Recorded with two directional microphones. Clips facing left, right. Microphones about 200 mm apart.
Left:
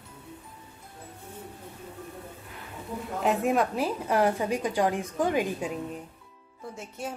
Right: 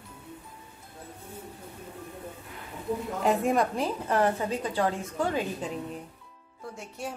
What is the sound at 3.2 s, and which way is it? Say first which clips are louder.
A woman's voice: left 1 dB; centre (ahead or behind).